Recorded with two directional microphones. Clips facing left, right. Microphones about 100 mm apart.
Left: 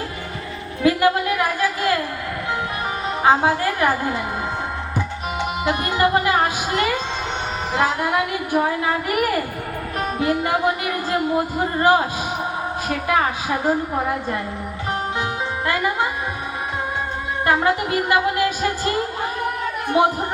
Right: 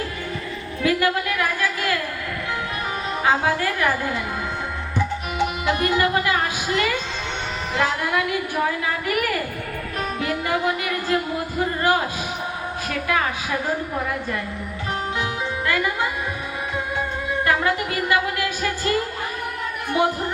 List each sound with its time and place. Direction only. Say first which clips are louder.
0.8 s a sound: left 4 dB; 30° left (ahead or behind)
3.2 s a child's voice: left 4 dB; 30° left (ahead or behind)
5.6 s music: left 2 dB; 30° left (ahead or behind)
7.8 s a child's voice: left 2 dB; 25° left (ahead or behind)
10.2 s music: left 4 dB; 30° left (ahead or behind)
11.6 s a child's voice: left 2 dB; 30° left (ahead or behind)
15.2 s music: left 1 dB; 30° left (ahead or behind)
17.4 s a child's voice: left 3 dB; 30° left (ahead or behind)
19.9 s a child's voice: left 3 dB; 25° left (ahead or behind)